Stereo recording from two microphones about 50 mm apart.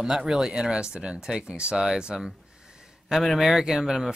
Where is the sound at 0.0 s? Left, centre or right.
Centre.